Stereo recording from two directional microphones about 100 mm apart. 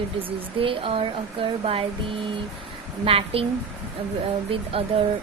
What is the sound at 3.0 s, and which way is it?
Speech, 75° right (ahead or behind).